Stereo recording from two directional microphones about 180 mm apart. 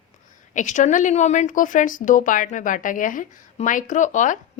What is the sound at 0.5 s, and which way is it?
A woman's voice, 45° left (ahead or behind).